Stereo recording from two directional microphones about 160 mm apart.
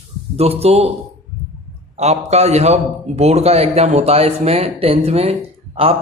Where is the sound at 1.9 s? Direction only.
45° right (ahead or behind).